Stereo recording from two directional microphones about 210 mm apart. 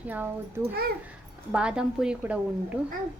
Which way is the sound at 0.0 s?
10° right (ahead or behind).